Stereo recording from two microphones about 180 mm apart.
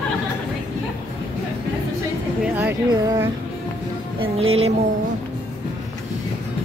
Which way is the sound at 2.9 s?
20° right (ahead or behind).